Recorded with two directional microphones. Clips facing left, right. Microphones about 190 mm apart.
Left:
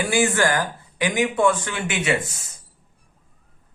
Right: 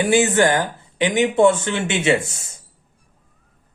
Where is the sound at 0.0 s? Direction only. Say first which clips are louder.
Right 4 dB; 20° right (ahead or behind).